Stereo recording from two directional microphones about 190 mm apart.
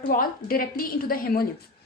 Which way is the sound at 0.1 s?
50° left (ahead or behind).